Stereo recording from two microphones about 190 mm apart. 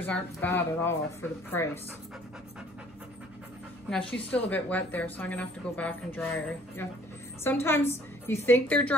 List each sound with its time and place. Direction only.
0.0 s a woman's voice: 10° left (ahead or behind)
3.9 s a woman's voice: 5° left (ahead or behind)